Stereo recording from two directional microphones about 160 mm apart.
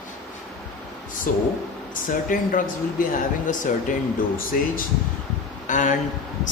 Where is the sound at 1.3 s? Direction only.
55° left (ahead or behind).